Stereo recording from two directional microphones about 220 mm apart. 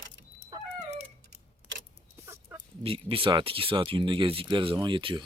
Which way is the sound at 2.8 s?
25° right (ahead or behind).